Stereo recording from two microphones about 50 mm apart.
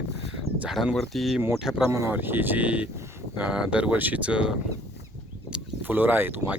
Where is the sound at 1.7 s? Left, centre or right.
Left.